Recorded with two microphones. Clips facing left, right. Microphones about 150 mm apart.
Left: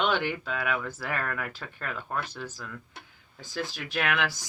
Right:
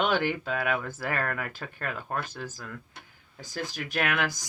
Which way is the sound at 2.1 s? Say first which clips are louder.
Even; 50° right (ahead or behind).